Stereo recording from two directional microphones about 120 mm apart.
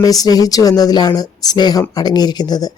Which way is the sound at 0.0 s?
30° left (ahead or behind).